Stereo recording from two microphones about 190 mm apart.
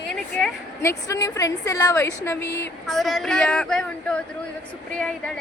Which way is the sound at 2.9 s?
Centre (ahead or behind).